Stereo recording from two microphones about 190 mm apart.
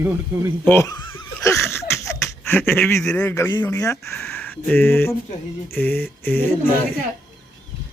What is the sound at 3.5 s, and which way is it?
Speech, 20° left (ahead or behind).